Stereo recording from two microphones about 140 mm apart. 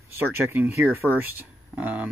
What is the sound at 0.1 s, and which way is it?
Speech, 15° right (ahead or behind).